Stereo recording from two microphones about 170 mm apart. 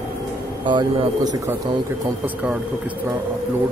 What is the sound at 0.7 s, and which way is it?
Speech, 25° right (ahead or behind).